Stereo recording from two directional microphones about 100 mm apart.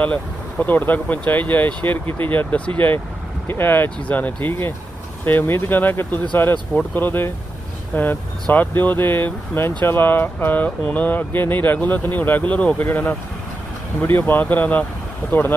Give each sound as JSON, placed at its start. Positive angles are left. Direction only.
{"t": 0.0, "sound": "speech", "side_deg": 15}